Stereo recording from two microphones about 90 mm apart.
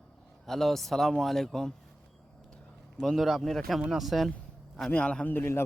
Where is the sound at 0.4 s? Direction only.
5° left (ahead or behind).